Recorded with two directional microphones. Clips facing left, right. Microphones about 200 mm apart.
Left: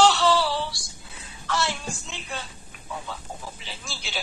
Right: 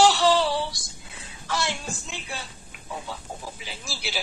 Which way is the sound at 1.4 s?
10° right (ahead or behind).